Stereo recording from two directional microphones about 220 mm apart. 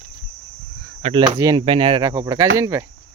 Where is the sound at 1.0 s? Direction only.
20° right (ahead or behind).